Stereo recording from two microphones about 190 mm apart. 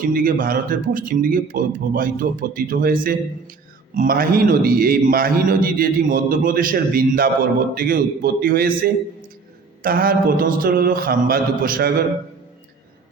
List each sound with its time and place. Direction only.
0.0 s a man's voice: 50° right (ahead or behind)